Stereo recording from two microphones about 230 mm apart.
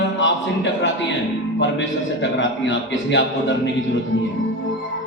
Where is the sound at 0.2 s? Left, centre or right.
Left.